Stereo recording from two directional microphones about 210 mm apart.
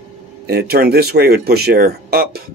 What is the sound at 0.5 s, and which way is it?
Speech, 50° right (ahead or behind).